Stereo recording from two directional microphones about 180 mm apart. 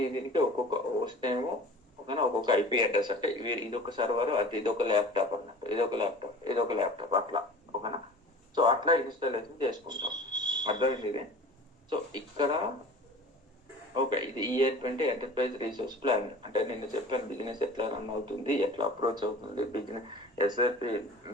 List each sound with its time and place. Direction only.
0.0 s a man's voice: 25° right (ahead or behind)
13.9 s a man's voice: 25° right (ahead or behind)